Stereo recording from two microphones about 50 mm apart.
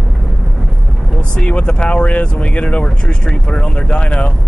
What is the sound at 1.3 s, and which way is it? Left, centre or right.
Speech, left.